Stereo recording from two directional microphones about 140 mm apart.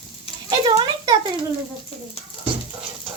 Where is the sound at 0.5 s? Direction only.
30° right (ahead or behind).